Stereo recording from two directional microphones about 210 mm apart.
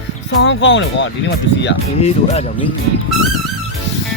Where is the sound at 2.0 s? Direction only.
30° left (ahead or behind).